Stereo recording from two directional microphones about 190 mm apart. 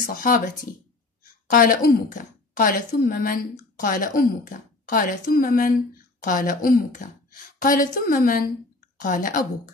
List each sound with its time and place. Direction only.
0.0 s a woman's voice: 50° left (ahead or behind)
1.5 s a woman's voice: 50° left (ahead or behind)